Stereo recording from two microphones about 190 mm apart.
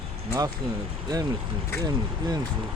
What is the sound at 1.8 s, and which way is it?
Speech, 20° right (ahead or behind).